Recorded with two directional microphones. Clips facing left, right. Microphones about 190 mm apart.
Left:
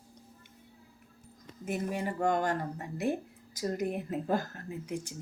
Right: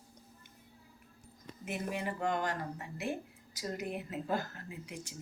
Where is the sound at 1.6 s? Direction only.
40° left (ahead or behind).